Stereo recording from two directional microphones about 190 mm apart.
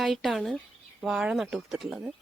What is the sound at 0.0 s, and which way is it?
Speech, centre (ahead or behind).